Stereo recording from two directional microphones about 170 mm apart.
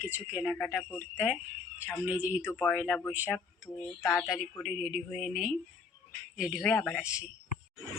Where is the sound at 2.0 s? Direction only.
10° right (ahead or behind).